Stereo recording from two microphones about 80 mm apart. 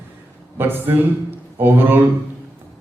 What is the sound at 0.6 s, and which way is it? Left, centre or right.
A man's voice, right.